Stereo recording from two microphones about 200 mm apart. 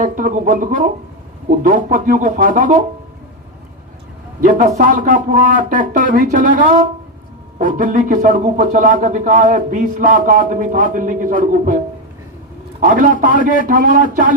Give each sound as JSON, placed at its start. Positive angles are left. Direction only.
{"t": 0.0, "sound": "speech", "side_deg": -40}
{"t": 4.4, "sound": "speech", "side_deg": -40}
{"t": 7.8, "sound": "speech", "side_deg": -40}
{"t": 12.8, "sound": "speech", "side_deg": -40}